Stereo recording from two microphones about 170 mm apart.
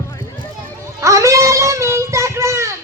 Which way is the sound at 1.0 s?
15° right (ahead or behind).